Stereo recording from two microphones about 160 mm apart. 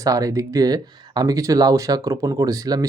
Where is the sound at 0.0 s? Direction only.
20° right (ahead or behind).